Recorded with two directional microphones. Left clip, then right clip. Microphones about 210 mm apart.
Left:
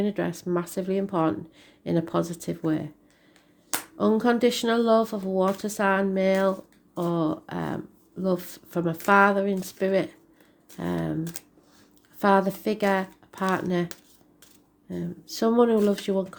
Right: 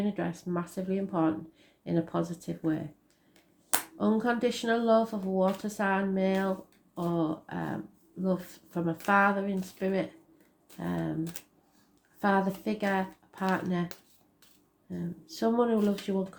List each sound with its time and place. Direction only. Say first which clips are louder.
0.0 s speech: left 6 dB; 50° left (ahead or behind)
3.9 s speech: left 7 dB; 50° left (ahead or behind)
12.2 s speech: left 7 dB; 50° left (ahead or behind)
14.8 s speech: left 6 dB; 50° left (ahead or behind)